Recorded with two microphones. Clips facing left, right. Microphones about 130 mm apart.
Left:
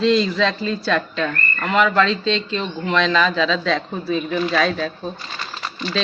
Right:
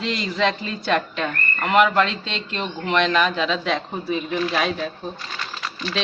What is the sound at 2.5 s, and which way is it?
Speech, 65° right (ahead or behind).